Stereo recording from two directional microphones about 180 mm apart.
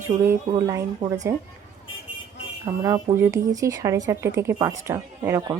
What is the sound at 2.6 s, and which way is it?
Speech, 15° right (ahead or behind).